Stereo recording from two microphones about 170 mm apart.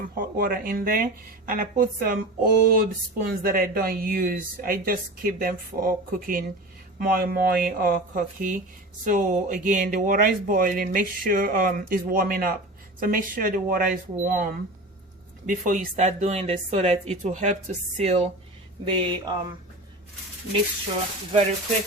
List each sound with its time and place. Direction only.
0.0 s speech: 55° right (ahead or behind); by 18.2 s 40° right (ahead or behind)
18.9 s speech: 30° right (ahead or behind)